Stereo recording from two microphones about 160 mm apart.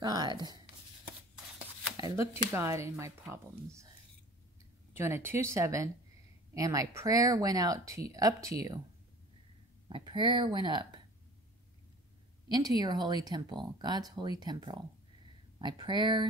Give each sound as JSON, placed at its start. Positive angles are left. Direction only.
{"t": 0.0, "sound": "speech", "side_deg": -25}
{"t": 2.0, "sound": "speech", "side_deg": -20}
{"t": 4.9, "sound": "speech", "side_deg": -15}
{"t": 9.8, "sound": "speech", "side_deg": -30}
{"t": 12.4, "sound": "speech", "side_deg": -25}